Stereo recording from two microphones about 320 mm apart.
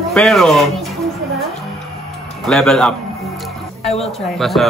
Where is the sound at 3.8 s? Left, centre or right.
Centre.